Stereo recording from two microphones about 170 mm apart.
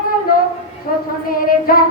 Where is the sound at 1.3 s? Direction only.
60° left (ahead or behind).